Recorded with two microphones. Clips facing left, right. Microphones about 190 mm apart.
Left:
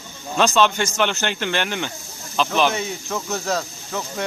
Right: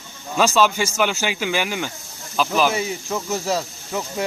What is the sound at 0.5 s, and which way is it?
Speech, 5° right (ahead or behind).